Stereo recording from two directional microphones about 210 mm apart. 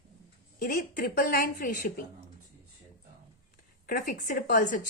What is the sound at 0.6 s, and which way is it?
Speech, 45° left (ahead or behind).